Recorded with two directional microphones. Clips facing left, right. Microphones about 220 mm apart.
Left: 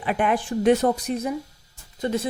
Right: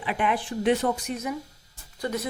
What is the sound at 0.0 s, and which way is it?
A woman's voice, 45° left (ahead or behind).